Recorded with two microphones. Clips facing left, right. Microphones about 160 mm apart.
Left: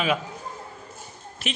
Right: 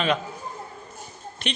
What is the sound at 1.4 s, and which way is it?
Speech, 5° left (ahead or behind).